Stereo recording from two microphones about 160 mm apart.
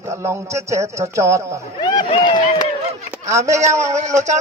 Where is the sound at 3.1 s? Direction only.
20° right (ahead or behind).